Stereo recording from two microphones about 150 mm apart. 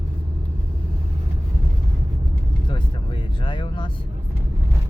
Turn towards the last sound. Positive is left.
turn(degrees=30)  # may be behind; listen again after turning